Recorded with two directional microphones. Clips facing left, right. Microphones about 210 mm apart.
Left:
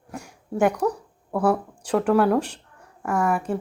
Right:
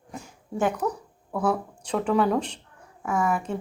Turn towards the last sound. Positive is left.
turn(degrees=5)  # may be behind; listen again after turning